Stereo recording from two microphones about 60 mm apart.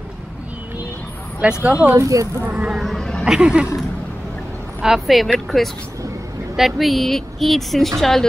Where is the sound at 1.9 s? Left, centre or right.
Right.